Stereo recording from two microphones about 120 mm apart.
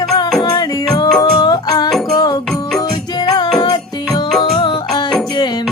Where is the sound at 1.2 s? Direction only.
35° left (ahead or behind).